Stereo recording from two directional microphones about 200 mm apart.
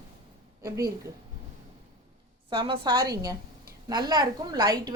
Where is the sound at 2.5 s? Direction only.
25° right (ahead or behind).